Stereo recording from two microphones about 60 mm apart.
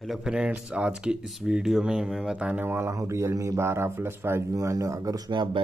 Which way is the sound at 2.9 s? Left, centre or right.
Right.